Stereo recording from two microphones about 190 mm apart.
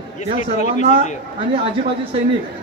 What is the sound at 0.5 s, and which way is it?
Speech, 40° left (ahead or behind).